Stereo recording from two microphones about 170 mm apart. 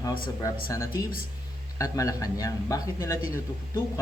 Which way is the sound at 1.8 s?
20° left (ahead or behind).